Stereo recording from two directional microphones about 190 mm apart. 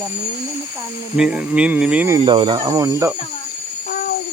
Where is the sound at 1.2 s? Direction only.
5° right (ahead or behind).